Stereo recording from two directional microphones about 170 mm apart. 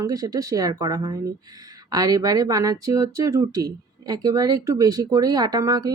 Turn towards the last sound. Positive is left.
turn(degrees=-20)  # may be behind; listen again after turning